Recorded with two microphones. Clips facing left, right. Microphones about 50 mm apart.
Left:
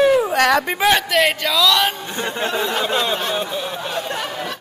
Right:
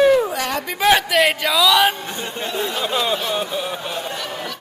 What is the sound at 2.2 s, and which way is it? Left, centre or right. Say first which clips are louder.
Speech: left 6 dB; left.